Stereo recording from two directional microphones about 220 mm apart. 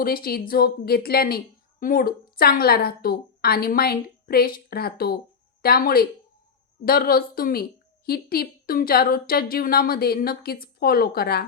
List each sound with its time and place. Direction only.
0.0 s a woman's voice: 40° left (ahead or behind)